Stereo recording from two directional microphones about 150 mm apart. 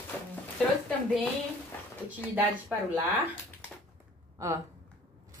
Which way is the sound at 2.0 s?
10° right (ahead or behind).